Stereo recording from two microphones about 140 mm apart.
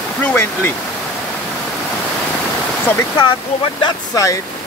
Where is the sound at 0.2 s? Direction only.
15° left (ahead or behind).